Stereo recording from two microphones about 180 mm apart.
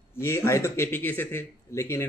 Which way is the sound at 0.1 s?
15° left (ahead or behind).